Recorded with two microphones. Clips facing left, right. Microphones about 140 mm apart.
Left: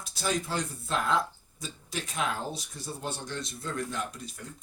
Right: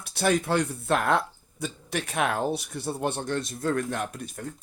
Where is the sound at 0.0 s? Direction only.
60° right (ahead or behind).